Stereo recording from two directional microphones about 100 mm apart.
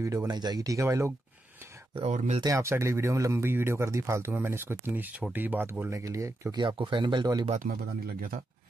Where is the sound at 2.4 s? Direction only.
30° right (ahead or behind).